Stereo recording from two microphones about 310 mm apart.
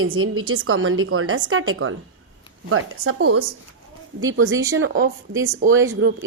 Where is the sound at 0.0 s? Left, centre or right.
Right.